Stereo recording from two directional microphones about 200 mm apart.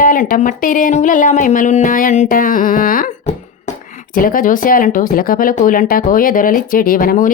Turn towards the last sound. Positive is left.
turn(degrees=45)  # may be behind; listen again after turning